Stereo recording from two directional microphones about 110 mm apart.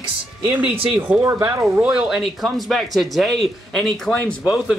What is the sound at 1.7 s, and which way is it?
Speech, 10° right (ahead or behind).